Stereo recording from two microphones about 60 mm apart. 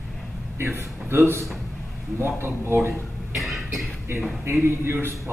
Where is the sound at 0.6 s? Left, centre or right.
Right.